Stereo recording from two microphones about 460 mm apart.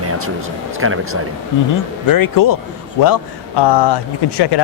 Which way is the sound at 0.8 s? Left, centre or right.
Right.